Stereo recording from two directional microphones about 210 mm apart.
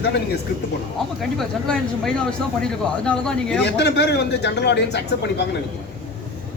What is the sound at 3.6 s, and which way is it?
A man's voice, 55° left (ahead or behind).